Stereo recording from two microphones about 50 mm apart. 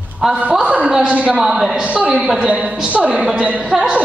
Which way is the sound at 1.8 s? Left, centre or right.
Right.